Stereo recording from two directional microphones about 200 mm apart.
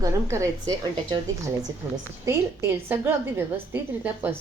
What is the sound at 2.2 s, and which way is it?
A woman's voice, 15° right (ahead or behind).